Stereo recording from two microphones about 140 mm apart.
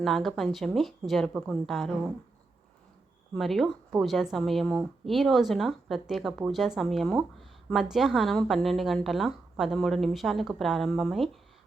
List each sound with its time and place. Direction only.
0.0 s a woman's voice: centre (ahead or behind)
3.3 s a woman's voice: centre (ahead or behind)